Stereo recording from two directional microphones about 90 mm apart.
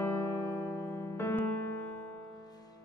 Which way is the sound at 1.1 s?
25° left (ahead or behind).